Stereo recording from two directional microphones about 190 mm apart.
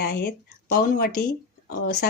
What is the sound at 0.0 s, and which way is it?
Speech, 55° left (ahead or behind).